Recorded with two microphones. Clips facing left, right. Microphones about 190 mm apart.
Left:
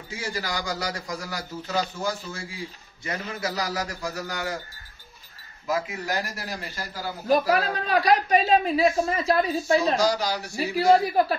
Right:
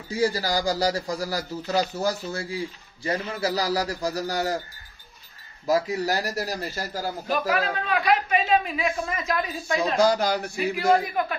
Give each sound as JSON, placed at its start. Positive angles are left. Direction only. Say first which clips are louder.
{"t": 0.1, "sound": "a man's voice", "louder": "right 8 dB", "side_deg": -35}
{"t": 5.7, "sound": "a man's voice", "louder": "right 5 dB", "side_deg": -40}
{"t": 7.2, "sound": "a woman's voice", "louder": "left 5 dB", "side_deg": 40}
{"t": 9.9, "sound": "speech", "louder": "right 3 dB", "side_deg": -55}
{"t": 10.6, "sound": "a woman's voice", "louder": "left 3 dB", "side_deg": 35}